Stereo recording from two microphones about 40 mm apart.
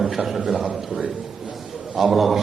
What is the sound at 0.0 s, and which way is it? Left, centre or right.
A man's voice, centre.